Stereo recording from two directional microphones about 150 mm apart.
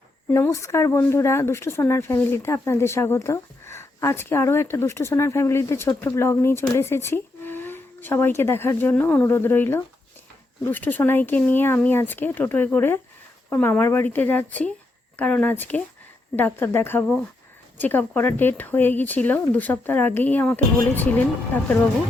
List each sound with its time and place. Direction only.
0.3 s speech: 15° left (ahead or behind)